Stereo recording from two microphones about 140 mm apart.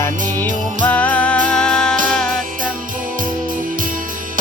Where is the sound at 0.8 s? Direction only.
10° left (ahead or behind).